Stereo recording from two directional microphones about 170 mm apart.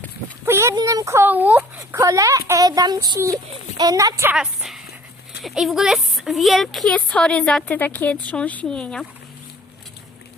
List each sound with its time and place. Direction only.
0.4 s a child's voice: 15° right (ahead or behind)
4.2 s a woman's voice: 5° right (ahead or behind)